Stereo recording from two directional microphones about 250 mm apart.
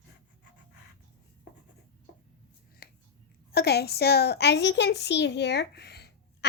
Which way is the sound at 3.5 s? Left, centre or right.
Left.